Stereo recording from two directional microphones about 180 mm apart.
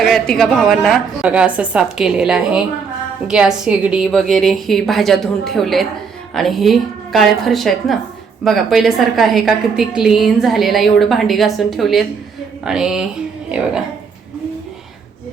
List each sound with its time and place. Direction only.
0.0 s a woman's voice: centre (ahead or behind)